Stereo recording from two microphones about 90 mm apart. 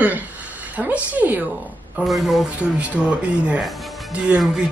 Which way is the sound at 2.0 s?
Centre (ahead or behind).